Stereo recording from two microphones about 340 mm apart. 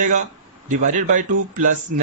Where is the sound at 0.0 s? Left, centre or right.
Right.